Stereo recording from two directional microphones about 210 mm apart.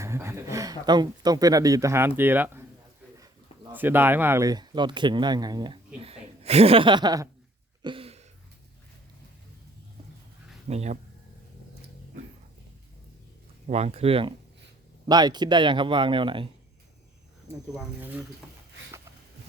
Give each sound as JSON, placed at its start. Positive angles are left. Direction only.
{"t": 0.0, "sound": "speech", "side_deg": -10}
{"t": 7.8, "sound": "a sound", "side_deg": -25}
{"t": 10.7, "sound": "speech", "side_deg": -30}
{"t": 13.7, "sound": "speech", "side_deg": -30}
{"t": 17.7, "sound": "speech", "side_deg": -10}